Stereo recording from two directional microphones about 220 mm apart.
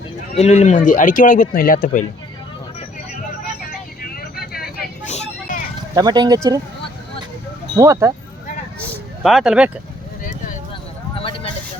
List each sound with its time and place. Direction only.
0.3 s speech: 30° left (ahead or behind)
3.6 s vehicle: 40° left (ahead or behind)
5.0 s vehicle: 30° left (ahead or behind)
6.0 s speech: 20° right (ahead or behind)
7.8 s speech: 15° right (ahead or behind)
9.2 s speech: centre (ahead or behind)
11.2 s a sound: 25° left (ahead or behind)